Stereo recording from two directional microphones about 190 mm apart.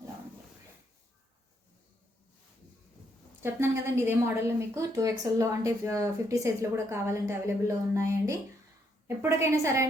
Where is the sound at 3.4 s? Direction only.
10° right (ahead or behind).